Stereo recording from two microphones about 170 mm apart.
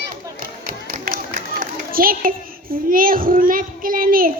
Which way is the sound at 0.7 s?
60° right (ahead or behind).